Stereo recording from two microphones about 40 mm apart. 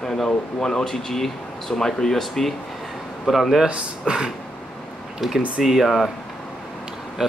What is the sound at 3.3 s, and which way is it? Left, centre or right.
Speech, centre.